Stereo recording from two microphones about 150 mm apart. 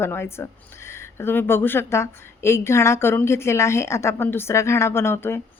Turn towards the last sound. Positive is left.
turn(degrees=15)  # may be behind; listen again after turning